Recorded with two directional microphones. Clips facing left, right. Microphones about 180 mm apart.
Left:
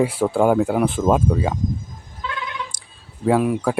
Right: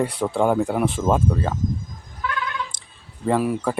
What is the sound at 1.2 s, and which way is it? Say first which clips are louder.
Speech: left 2 dB; 10° left (ahead or behind).